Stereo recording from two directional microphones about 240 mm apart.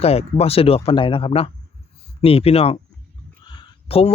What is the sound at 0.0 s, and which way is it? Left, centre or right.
A man's voice, left.